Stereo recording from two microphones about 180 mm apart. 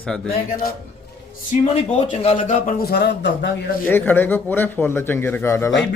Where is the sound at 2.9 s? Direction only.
65° left (ahead or behind).